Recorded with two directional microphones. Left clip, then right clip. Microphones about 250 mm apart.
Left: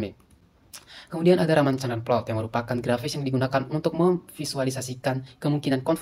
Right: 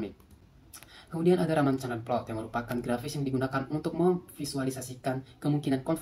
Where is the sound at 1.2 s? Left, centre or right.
Left.